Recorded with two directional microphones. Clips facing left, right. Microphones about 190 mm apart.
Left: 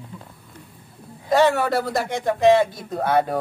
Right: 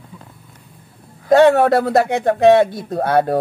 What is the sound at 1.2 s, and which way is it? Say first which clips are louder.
A man's voice: right 7 dB; 65° right (ahead or behind).